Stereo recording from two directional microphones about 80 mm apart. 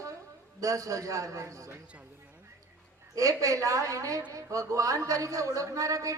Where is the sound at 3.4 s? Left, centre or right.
Right.